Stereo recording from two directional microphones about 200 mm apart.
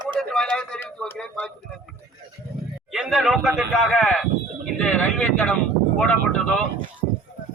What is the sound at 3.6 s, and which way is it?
Speech, centre (ahead or behind).